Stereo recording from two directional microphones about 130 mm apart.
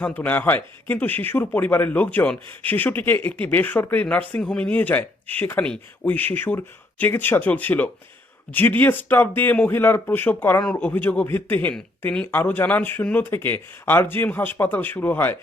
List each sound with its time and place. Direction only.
0.0 s speech: 15° left (ahead or behind)